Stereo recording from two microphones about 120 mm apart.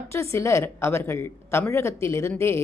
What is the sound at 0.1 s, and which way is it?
Speech, 25° left (ahead or behind).